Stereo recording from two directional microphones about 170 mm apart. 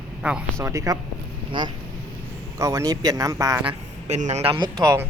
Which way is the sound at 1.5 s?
30° right (ahead or behind).